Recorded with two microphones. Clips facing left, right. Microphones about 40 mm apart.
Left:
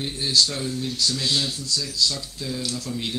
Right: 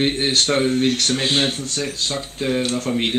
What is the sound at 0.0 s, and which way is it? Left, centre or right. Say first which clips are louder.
Speech: right 4 dB; right.